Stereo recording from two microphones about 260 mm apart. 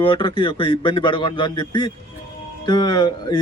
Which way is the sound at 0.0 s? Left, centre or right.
Centre.